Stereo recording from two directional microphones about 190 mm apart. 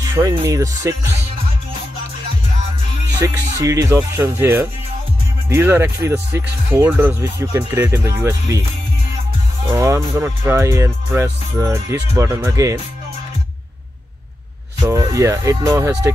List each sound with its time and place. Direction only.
0.1 s speech: 15° right (ahead or behind)
3.2 s speech: 15° right (ahead or behind)
9.8 s speech: 15° right (ahead or behind)
14.8 s speech: 15° right (ahead or behind)